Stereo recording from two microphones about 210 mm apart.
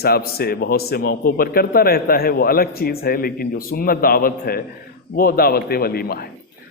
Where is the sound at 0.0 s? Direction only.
45° left (ahead or behind).